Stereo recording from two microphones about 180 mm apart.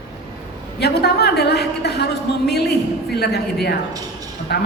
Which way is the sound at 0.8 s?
65° left (ahead or behind).